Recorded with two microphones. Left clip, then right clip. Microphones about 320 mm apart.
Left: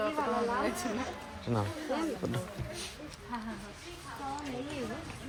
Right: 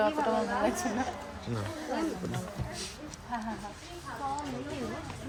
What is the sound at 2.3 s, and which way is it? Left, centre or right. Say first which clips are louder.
Speech: right 1 dB; centre.